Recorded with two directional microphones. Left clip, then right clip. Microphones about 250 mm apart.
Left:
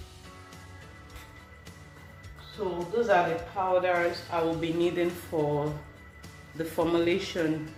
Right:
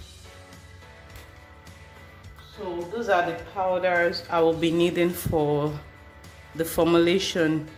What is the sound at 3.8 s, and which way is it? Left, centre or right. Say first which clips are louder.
A man's voice: right 4 dB; right.